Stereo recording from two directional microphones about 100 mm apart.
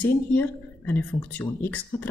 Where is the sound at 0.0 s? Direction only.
20° left (ahead or behind).